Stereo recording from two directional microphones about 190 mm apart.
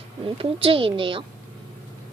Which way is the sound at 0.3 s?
30° right (ahead or behind).